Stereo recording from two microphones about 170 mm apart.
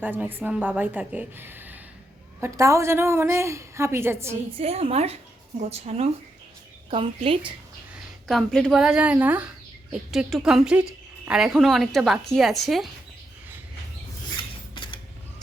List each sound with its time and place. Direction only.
0.0 s a woman's voice: 10° right (ahead or behind)
4.5 s a woman's voice: 35° right (ahead or behind)
8.3 s a woman's voice: centre (ahead or behind)